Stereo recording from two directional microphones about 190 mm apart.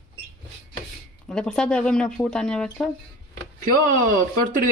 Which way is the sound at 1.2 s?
5° left (ahead or behind).